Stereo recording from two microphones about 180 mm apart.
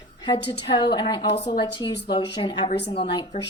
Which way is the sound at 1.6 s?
20° left (ahead or behind).